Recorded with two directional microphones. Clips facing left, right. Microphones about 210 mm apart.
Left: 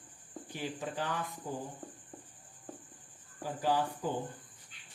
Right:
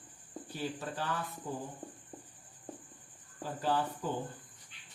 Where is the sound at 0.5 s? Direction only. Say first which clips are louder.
Even; 15° left (ahead or behind).